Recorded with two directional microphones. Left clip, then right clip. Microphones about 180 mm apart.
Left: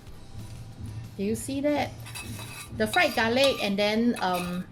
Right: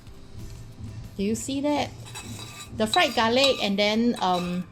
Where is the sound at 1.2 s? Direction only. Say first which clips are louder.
Right 2 dB; 20° right (ahead or behind).